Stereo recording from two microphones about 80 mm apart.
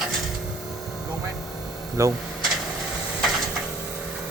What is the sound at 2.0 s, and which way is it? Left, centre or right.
Speech, right.